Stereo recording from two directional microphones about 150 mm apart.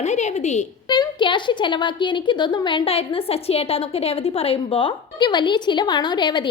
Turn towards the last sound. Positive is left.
turn(degrees=30)  # may be behind; listen again after turning